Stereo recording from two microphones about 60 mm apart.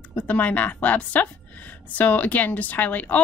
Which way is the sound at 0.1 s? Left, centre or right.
Left.